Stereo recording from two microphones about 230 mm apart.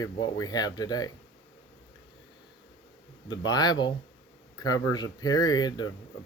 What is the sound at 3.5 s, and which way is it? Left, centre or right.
Speech, centre.